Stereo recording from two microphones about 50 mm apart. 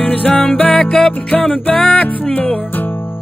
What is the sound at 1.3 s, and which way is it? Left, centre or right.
Music, left.